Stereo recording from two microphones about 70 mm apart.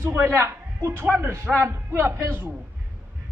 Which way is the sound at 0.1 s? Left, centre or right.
Right.